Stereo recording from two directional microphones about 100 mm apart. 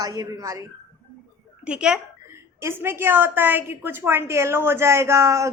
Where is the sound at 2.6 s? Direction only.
25° right (ahead or behind).